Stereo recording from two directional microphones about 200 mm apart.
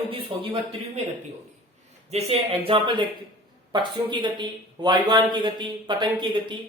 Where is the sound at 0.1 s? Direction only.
25° right (ahead or behind).